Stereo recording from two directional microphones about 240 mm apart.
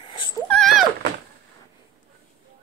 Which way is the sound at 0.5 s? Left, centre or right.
Centre.